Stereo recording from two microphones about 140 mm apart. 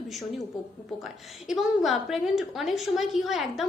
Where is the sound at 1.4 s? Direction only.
Centre (ahead or behind).